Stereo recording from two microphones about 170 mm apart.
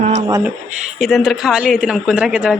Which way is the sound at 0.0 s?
45° right (ahead or behind).